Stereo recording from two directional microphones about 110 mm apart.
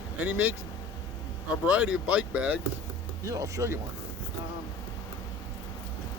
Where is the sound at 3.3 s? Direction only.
30° right (ahead or behind).